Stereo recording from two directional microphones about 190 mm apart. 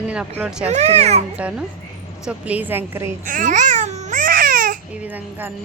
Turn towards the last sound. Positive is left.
turn(degrees=-10)  # may be behind; listen again after turning